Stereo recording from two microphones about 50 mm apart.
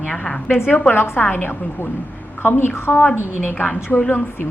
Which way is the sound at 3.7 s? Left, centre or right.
Left.